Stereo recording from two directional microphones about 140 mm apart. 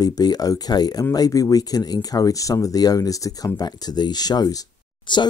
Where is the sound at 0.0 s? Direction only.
30° left (ahead or behind).